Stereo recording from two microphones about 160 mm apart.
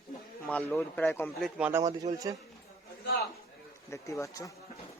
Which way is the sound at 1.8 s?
20° right (ahead or behind).